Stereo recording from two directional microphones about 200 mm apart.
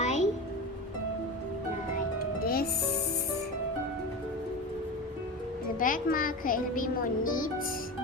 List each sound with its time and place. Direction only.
0.0 s music: 35° left (ahead or behind)
2.4 s music: 50° left (ahead or behind)
5.8 s a child's voice: 45° left (ahead or behind)